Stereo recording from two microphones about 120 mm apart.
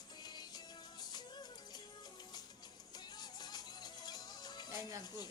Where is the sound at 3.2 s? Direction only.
35° left (ahead or behind).